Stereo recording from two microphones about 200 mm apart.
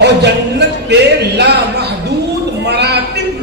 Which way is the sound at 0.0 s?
60° right (ahead or behind).